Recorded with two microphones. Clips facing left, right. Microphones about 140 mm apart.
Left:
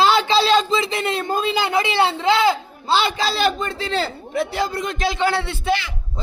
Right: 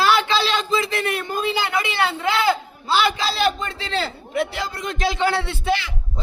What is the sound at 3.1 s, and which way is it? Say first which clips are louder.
A man's voice: left 1 dB; 40° left (ahead or behind).